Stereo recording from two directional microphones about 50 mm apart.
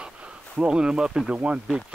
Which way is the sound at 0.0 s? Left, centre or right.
Right.